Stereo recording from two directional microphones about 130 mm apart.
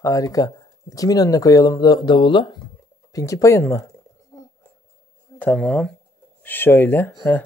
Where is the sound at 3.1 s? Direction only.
25° left (ahead or behind).